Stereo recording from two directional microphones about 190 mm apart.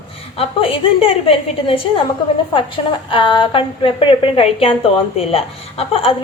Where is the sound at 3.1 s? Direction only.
25° left (ahead or behind).